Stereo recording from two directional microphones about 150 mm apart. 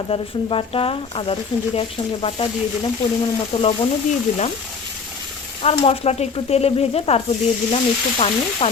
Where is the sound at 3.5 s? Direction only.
30° left (ahead or behind).